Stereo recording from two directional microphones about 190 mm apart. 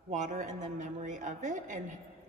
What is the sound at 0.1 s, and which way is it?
A woman's voice, 40° right (ahead or behind).